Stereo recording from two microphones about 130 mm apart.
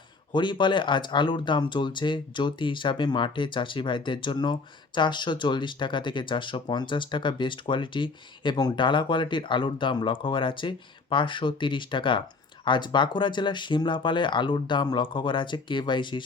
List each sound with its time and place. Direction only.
0.3 s speech: 35° left (ahead or behind)